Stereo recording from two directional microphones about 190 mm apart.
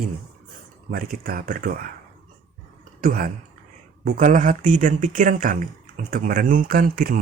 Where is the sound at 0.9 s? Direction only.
50° right (ahead or behind).